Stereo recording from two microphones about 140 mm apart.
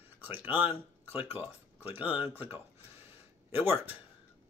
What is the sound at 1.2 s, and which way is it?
Speech, 45° left (ahead or behind).